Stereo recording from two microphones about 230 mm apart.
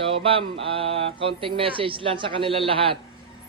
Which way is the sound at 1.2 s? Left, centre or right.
Right.